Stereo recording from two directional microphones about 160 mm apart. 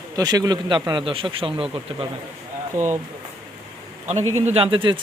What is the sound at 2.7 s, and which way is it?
Speech, 50° right (ahead or behind).